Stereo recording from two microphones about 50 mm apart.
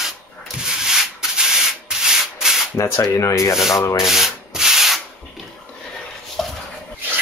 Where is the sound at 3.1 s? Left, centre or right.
Left.